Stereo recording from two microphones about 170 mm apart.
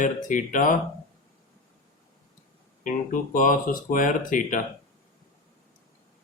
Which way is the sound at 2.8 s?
50° left (ahead or behind).